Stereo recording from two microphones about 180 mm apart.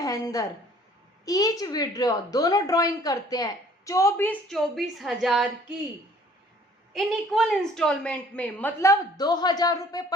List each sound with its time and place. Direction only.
0.0 s a woman's voice: 20° left (ahead or behind); by 5.7 s centre (ahead or behind)
6.9 s a woman's voice: centre (ahead or behind); by 10.0 s 20° left (ahead or behind)